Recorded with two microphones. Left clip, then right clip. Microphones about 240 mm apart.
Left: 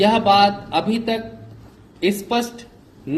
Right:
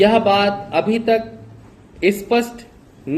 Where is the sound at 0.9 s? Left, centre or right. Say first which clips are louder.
Right 6 dB; left.